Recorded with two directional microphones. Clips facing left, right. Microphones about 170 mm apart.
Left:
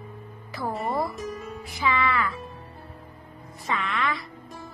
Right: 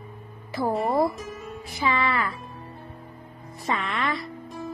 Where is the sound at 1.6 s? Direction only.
35° right (ahead or behind).